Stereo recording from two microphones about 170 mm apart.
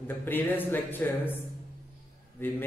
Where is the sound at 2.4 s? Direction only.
10° left (ahead or behind).